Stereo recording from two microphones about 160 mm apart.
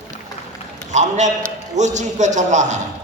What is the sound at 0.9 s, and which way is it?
A man's voice, 45° right (ahead or behind).